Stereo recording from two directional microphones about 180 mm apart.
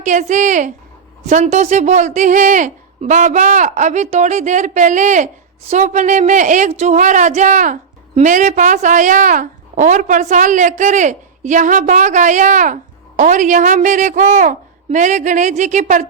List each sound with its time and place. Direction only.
0.0 s a woman's voice: 40° right (ahead or behind)